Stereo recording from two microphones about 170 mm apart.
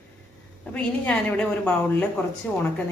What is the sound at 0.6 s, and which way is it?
A woman's voice, 5° left (ahead or behind).